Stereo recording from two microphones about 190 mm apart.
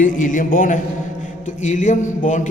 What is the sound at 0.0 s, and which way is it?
A man's voice, 45° left (ahead or behind).